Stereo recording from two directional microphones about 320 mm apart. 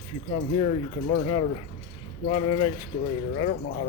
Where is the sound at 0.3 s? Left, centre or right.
Centre.